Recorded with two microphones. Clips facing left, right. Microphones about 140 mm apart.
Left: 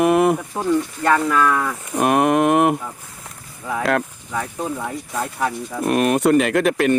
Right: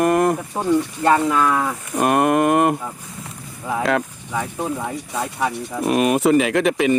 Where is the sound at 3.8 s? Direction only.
Centre (ahead or behind).